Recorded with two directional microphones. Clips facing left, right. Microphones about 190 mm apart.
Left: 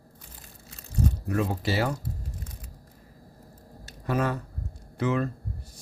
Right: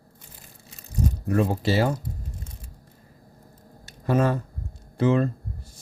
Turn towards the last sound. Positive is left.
turn(degrees=-30)  # may be behind; listen again after turning